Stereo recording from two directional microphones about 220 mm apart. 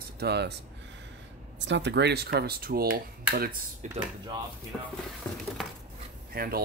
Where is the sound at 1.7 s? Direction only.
50° right (ahead or behind).